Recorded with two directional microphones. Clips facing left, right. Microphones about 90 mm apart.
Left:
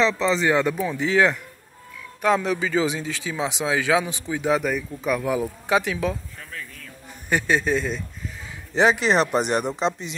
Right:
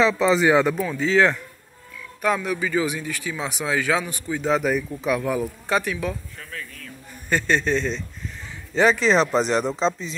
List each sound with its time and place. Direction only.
0.0 s speech: 10° right (ahead or behind)
0.7 s a man's voice: 20° left (ahead or behind)
4.6 s speech: centre (ahead or behind)
5.3 s a man's voice: 15° left (ahead or behind)
9.0 s speech: 65° left (ahead or behind)
9.6 s a man's voice: 15° left (ahead or behind)